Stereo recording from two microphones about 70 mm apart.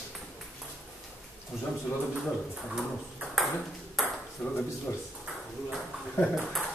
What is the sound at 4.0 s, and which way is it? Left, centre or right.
Ping, centre.